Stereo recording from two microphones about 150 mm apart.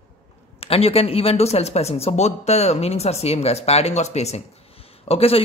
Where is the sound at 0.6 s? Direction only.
40° left (ahead or behind).